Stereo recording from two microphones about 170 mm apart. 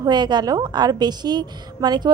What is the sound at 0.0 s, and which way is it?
A woman's voice, 25° right (ahead or behind).